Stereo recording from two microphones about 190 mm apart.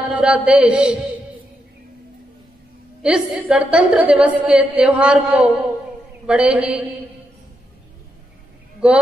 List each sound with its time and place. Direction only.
0.1 s a woman's voice: 5° right (ahead or behind)
3.0 s a woman's voice: 5° right (ahead or behind)